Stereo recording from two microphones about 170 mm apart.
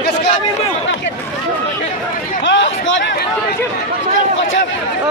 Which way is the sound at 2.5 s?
90° left.